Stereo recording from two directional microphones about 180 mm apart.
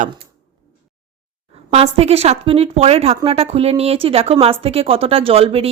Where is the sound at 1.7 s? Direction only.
35° right (ahead or behind).